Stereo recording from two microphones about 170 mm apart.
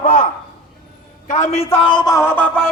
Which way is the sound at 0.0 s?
45° left (ahead or behind).